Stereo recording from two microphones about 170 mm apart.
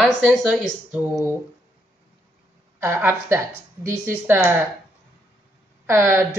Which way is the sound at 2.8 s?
15° right (ahead or behind).